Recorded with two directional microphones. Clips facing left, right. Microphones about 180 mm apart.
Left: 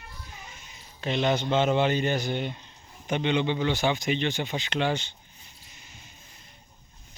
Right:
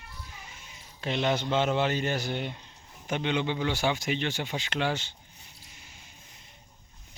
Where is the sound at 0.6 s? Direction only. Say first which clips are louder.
Left 1 dB; 5° right (ahead or behind).